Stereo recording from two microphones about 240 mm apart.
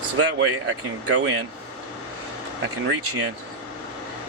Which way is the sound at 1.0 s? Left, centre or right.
Right.